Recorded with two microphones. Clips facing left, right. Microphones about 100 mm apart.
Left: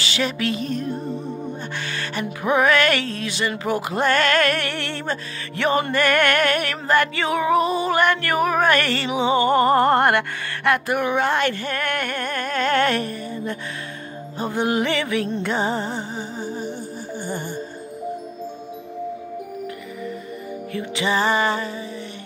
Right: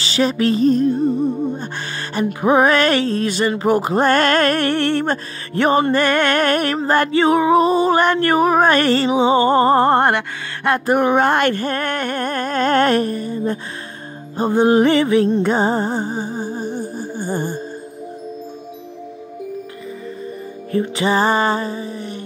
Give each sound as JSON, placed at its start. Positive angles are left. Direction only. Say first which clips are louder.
{"t": 0.0, "sound": "music", "louder": "right 7 dB", "side_deg": -35}
{"t": 11.7, "sound": "music", "louder": "right 4 dB", "side_deg": -30}
{"t": 20.7, "sound": "music", "louder": "right 6 dB", "side_deg": -40}